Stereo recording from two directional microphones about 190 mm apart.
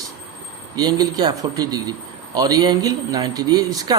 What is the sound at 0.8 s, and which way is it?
A man's voice, 20° right (ahead or behind).